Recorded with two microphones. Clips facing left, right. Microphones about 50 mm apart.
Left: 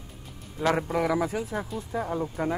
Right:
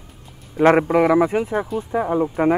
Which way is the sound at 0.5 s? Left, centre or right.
Right.